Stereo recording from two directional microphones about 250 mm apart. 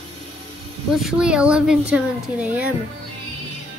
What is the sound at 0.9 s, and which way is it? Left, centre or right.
Speech, centre.